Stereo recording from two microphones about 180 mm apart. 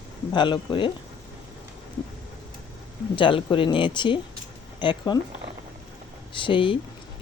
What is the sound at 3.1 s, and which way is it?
Speech, 30° left (ahead or behind).